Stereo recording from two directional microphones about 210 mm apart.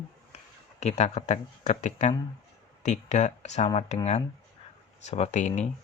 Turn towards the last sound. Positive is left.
turn(degrees=35)  # may be behind; listen again after turning